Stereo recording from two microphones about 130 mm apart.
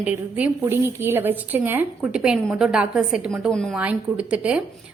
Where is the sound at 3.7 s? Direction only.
10° right (ahead or behind).